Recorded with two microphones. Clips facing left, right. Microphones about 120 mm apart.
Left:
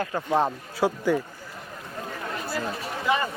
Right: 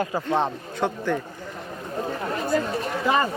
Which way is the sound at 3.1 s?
40° right (ahead or behind).